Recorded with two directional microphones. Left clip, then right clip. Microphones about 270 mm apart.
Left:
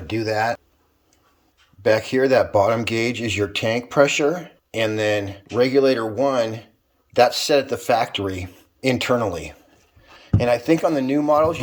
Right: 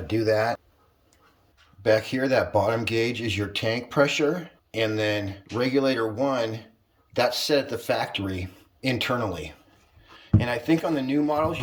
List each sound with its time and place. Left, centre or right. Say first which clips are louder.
0.1 s speech: left 1 dB; centre
1.8 s speech: left 5 dB; centre